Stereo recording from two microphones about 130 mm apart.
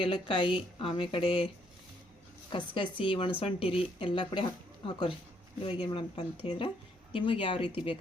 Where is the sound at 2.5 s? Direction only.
35° left (ahead or behind).